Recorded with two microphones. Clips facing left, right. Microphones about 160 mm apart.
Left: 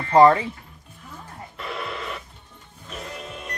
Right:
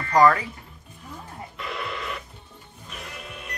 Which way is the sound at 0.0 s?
25° left (ahead or behind).